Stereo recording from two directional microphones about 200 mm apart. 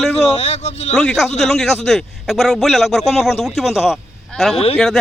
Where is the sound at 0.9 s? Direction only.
Centre (ahead or behind).